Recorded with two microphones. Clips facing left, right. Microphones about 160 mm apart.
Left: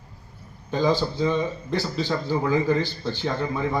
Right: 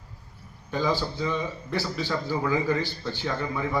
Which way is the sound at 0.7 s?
20° left (ahead or behind).